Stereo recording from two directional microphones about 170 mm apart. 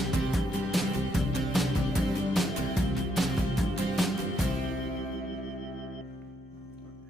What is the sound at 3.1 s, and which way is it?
Music, centre (ahead or behind).